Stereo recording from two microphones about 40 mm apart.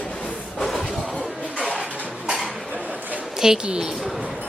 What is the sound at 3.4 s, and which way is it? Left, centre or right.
Speech, centre.